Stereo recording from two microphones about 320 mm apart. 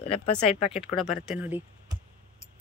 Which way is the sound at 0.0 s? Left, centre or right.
Centre.